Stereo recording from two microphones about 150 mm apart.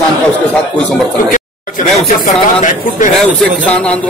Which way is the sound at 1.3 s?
55° left (ahead or behind).